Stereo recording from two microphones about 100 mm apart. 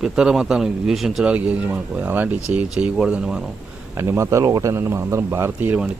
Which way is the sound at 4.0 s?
30° right (ahead or behind).